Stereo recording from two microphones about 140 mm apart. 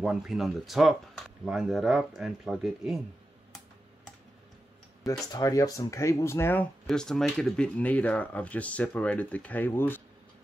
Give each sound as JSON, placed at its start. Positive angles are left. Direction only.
{"t": 0.0, "sound": "speech", "side_deg": -5}
{"t": 5.3, "sound": "speech", "side_deg": 25}
{"t": 6.9, "sound": "speech", "side_deg": 5}